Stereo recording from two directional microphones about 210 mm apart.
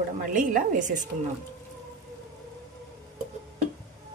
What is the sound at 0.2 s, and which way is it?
Speech, 40° right (ahead or behind).